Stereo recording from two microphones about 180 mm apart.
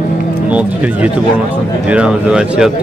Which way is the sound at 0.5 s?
10° right (ahead or behind).